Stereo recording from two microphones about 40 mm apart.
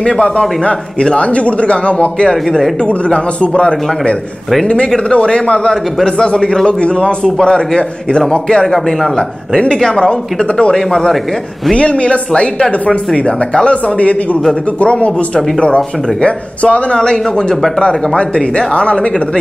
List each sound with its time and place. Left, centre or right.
0.0 s a man's voice: left
11.7 s speech: left
14.8 s speech: left